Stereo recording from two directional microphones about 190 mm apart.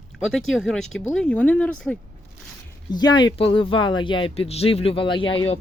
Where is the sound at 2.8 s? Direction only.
20° left (ahead or behind).